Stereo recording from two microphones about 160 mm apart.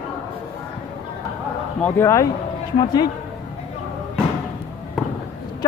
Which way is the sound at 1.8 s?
15° left (ahead or behind).